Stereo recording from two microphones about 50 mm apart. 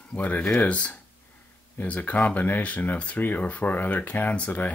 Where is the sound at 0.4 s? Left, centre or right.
Centre.